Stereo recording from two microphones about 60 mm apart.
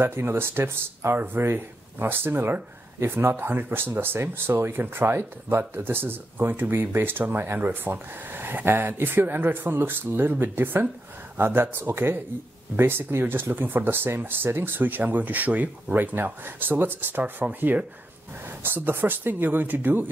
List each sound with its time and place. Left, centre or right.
0.0 s speech: right